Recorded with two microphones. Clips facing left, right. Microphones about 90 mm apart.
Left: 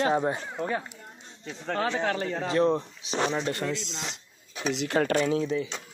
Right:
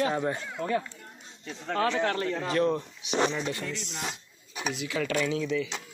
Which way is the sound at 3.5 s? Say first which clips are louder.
Left 4 dB; 70° left (ahead or behind).